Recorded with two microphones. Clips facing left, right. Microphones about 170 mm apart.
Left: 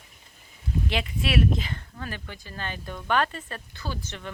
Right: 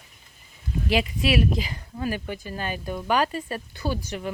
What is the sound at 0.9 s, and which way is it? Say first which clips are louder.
Speech: right 6 dB; 5° right (ahead or behind).